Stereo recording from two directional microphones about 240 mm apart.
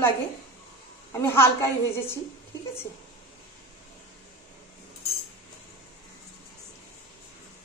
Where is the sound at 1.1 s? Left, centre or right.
Centre.